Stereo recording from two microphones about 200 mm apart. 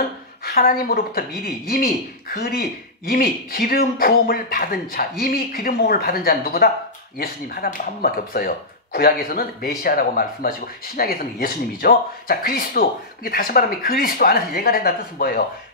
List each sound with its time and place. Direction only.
0.5 s speech: 45° left (ahead or behind)